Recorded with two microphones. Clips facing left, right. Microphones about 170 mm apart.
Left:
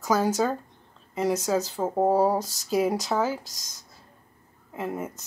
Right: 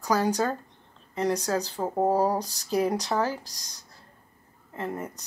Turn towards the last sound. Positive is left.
turn(degrees=5)  # may be behind; listen again after turning